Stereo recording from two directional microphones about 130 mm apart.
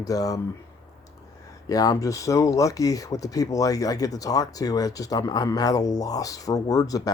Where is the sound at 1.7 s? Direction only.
30° left (ahead or behind).